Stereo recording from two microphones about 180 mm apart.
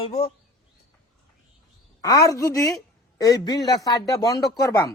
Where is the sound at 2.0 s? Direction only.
20° left (ahead or behind).